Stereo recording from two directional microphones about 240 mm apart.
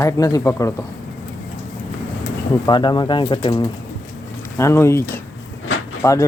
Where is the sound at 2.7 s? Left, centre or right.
Centre.